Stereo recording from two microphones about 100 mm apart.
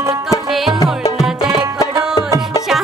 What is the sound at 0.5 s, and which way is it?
Music, centre (ahead or behind).